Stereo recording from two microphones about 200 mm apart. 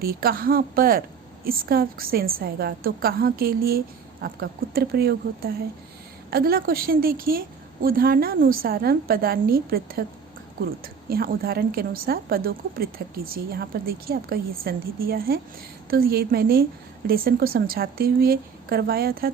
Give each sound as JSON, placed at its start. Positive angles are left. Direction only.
{"t": 0.0, "sound": "a woman's voice", "side_deg": -50}
{"t": 11.1, "sound": "a woman's voice", "side_deg": -50}